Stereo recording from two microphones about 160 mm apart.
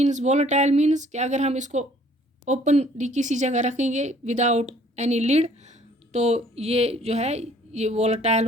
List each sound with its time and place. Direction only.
0.0 s speech: 50° right (ahead or behind)